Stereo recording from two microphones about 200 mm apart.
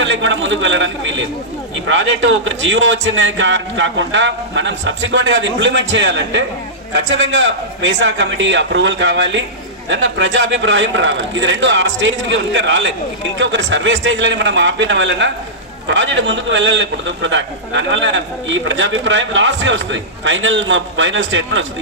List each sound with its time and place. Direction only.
0.0 s a man's voice: 65° right (ahead or behind)